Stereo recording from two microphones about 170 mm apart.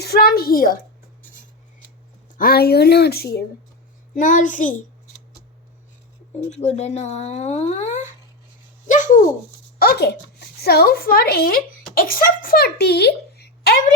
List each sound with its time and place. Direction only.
0.0 s a woman's voice: 65° left (ahead or behind)
2.4 s a woman's voice: 65° left (ahead or behind)
4.1 s a child's voice: 50° left (ahead or behind)
6.5 s speech: 40° left (ahead or behind)
8.9 s bird: 50° left (ahead or behind)
9.7 s a woman's voice: 65° left (ahead or behind)